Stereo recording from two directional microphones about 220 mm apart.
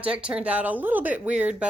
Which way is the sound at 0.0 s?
5° right (ahead or behind).